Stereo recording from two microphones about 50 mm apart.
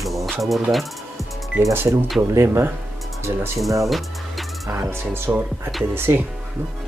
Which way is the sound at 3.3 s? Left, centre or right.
Right.